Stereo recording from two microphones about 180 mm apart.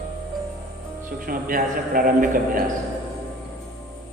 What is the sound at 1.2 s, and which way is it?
A man's voice, 50° right (ahead or behind).